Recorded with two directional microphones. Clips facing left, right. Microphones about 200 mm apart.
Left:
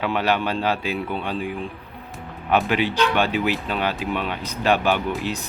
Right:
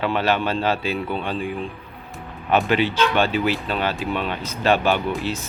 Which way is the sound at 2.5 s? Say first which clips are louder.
Right 1 dB; 10° left (ahead or behind).